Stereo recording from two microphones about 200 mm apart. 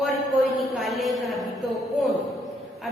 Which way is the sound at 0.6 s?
Centre (ahead or behind).